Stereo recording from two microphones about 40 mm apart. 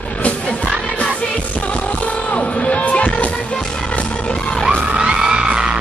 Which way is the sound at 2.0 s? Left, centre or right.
Left.